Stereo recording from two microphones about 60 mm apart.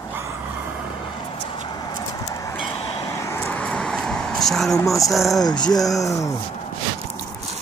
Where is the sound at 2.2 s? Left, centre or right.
Left.